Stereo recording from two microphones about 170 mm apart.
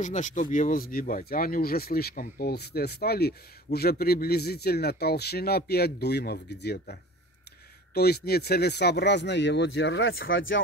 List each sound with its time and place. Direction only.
0.0 s speech: 45° left (ahead or behind); by 10.6 s 90° left